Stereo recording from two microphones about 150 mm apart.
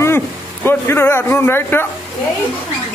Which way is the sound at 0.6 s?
15° left (ahead or behind).